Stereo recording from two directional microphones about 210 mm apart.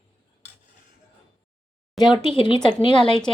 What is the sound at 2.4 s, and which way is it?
Speech, 25° left (ahead or behind).